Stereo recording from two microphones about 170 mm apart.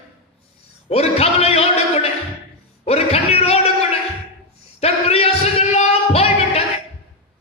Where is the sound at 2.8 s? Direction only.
35° left (ahead or behind).